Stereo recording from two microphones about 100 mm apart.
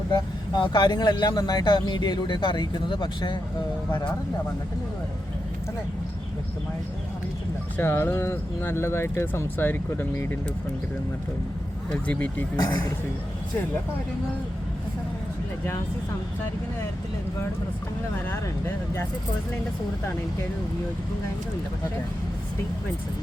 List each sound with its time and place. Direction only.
0.1 s speech: 45° left (ahead or behind)
7.8 s speech: 25° left (ahead or behind)
12.0 s speech: 15° left (ahead or behind)
12.5 s speech: 45° left (ahead or behind)
18.3 s speech: 25° left (ahead or behind)